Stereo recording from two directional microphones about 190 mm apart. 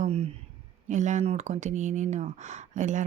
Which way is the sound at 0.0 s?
30° right (ahead or behind).